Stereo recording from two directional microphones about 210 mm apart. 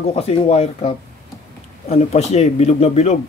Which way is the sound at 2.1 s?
30° left (ahead or behind).